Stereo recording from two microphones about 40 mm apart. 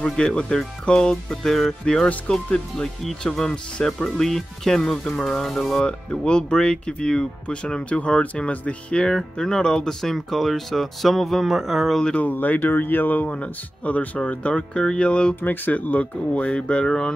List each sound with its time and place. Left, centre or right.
0.0 s speech: centre
3.3 s speech: centre
5.4 s speech: centre
5.9 s speech: left
8.9 s speech: centre
12.2 s speech: left
13.3 s speech: left
15.4 s speech: left
16.4 s speech: left